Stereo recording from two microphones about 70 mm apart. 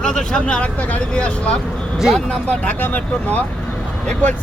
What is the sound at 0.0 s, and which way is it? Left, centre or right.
Speech, centre.